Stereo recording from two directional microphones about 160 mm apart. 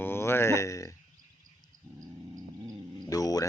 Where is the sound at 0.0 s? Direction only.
15° left (ahead or behind).